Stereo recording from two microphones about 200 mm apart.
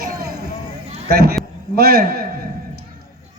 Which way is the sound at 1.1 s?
50° right (ahead or behind).